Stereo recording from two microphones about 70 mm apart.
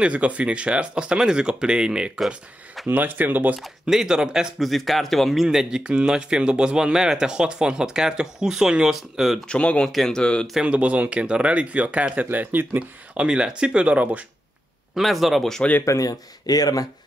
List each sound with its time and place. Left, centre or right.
0.0 s speech: centre
2.1 s speech: centre
2.9 s speech: right
3.8 s speech: centre
9.5 s speech: centre
9.8 s speech: centre
10.6 s speech: centre
15.0 s speech: centre
15.8 s speech: left
16.1 s speech: left